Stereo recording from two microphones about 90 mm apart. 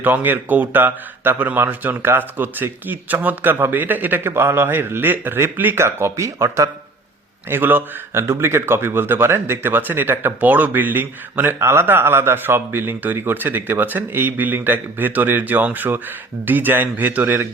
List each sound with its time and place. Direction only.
0.0 s speech: 20° right (ahead or behind); by 6.7 s 35° right (ahead or behind)
7.5 s speech: 20° right (ahead or behind)